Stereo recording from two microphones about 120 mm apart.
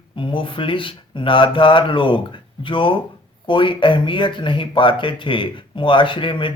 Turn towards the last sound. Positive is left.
turn(degrees=45)  # may be behind; listen again after turning